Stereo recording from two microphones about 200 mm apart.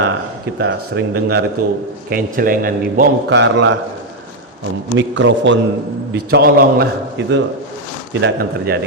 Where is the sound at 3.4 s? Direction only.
65° right (ahead or behind).